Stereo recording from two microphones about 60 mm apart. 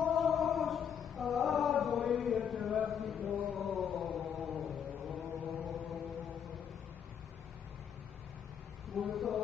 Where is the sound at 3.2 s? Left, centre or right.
Right.